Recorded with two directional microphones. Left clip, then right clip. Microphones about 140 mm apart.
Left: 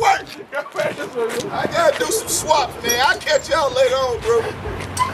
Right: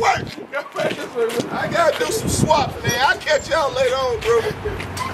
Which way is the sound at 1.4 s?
15° left (ahead or behind).